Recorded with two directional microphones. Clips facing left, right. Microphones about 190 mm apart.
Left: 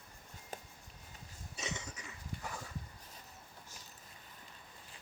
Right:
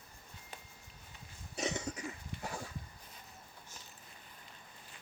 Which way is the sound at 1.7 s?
35° right (ahead or behind).